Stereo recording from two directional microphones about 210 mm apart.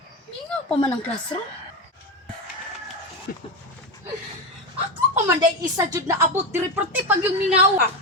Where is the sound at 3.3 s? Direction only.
45° left (ahead or behind).